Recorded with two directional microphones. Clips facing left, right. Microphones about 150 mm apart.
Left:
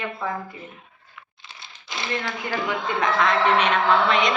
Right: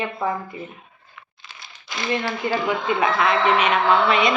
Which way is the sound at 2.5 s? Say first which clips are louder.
Right 3 dB; 10° right (ahead or behind).